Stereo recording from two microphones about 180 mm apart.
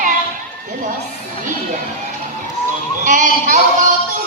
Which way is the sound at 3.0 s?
45° right (ahead or behind).